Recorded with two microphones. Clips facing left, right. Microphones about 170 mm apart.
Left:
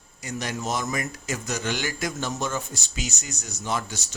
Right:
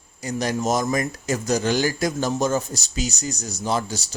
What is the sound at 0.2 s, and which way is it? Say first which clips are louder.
Speech: right 7 dB; 35° right (ahead or behind).